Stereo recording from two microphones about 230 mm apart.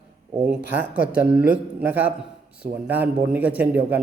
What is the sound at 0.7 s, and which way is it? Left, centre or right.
A man's voice, centre.